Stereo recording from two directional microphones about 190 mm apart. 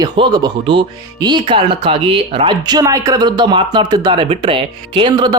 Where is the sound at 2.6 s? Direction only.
20° right (ahead or behind).